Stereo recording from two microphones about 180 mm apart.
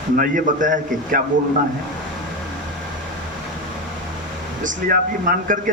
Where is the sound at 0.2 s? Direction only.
45° right (ahead or behind).